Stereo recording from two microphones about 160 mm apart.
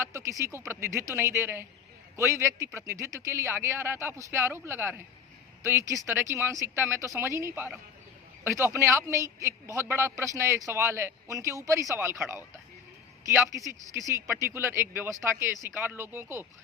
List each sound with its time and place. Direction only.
0.0 s a man's voice: 20° right (ahead or behind)